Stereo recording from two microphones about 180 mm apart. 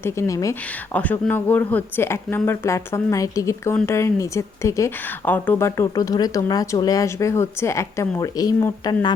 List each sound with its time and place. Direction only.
0.0 s speech: 15° left (ahead or behind)